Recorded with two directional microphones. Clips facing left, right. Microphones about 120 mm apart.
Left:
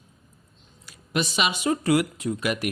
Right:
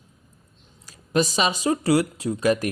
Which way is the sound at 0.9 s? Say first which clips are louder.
Right 5 dB; 40° right (ahead or behind).